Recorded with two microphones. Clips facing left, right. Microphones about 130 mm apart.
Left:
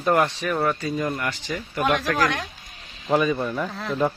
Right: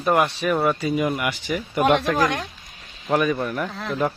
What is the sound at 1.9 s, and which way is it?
Speech, 30° right (ahead or behind).